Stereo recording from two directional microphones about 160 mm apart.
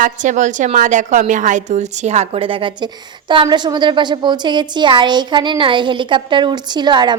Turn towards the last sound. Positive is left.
turn(degrees=-25)  # may be behind; listen again after turning